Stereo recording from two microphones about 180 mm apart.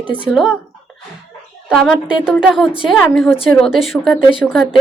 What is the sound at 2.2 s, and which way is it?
A woman's voice, 5° right (ahead or behind).